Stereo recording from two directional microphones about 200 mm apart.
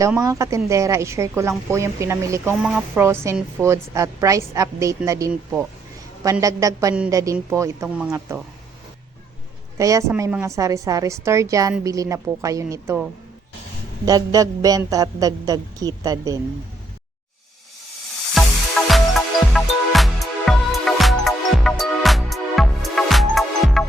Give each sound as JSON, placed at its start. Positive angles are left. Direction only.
{"t": 0.0, "sound": "speech", "side_deg": -15}
{"t": 9.7, "sound": "a woman's voice", "side_deg": -15}
{"t": 18.9, "sound": "music", "side_deg": 0}